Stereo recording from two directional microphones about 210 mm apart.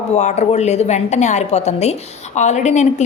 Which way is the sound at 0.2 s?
35° left (ahead or behind).